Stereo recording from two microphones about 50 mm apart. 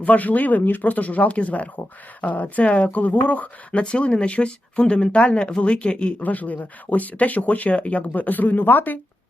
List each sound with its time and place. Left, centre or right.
0.0 s speech: left
6.2 s speech: left